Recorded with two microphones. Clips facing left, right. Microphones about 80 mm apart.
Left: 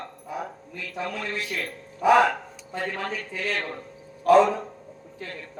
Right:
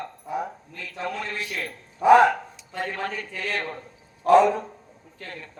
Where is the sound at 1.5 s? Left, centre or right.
Right.